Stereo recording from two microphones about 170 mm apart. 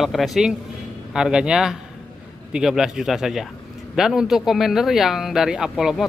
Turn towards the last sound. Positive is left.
turn(degrees=-5)  # may be behind; listen again after turning